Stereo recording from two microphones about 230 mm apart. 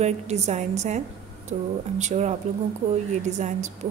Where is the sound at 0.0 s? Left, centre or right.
Right.